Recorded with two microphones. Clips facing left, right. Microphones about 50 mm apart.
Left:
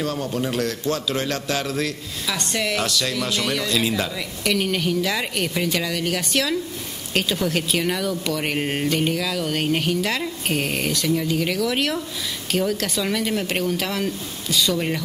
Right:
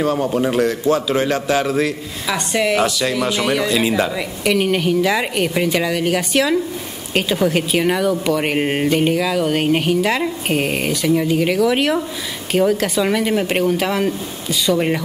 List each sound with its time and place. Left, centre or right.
0.0 s a man's voice: centre